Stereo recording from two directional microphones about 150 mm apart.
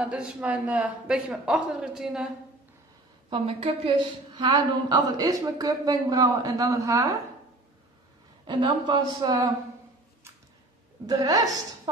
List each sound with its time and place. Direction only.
0.0 s a man's voice: 10° right (ahead or behind)
3.3 s a woman's voice: 35° right (ahead or behind); by 7.2 s 20° right (ahead or behind)
8.5 s a woman's voice: 30° right (ahead or behind)
11.1 s a woman's voice: 25° right (ahead or behind)